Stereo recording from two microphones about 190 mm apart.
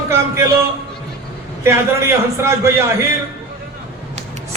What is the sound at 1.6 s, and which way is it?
A man's voice, 15° right (ahead or behind).